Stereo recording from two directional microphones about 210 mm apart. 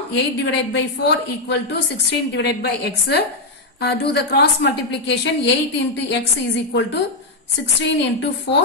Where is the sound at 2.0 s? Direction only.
55° left (ahead or behind).